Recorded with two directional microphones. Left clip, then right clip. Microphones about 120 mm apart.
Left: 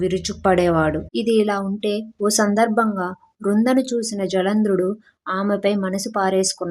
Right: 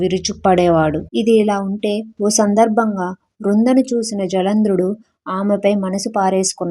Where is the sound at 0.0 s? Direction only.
30° right (ahead or behind).